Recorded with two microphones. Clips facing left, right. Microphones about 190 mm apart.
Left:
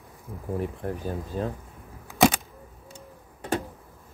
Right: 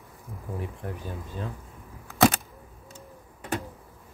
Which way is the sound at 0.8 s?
40° left (ahead or behind).